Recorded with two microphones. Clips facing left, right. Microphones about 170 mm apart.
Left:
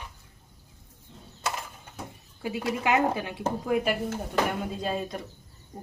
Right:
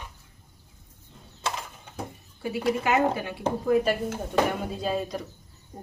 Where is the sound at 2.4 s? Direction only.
15° left (ahead or behind).